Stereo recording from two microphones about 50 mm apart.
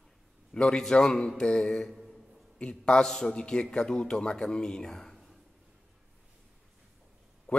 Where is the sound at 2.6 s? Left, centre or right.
Centre.